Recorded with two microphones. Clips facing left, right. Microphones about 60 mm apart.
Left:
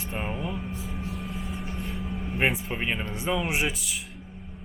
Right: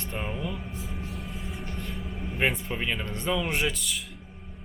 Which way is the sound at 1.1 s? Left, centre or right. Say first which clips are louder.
Left 3 dB; centre.